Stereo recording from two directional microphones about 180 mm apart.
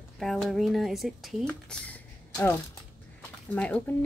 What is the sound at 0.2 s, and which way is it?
Speech, centre (ahead or behind).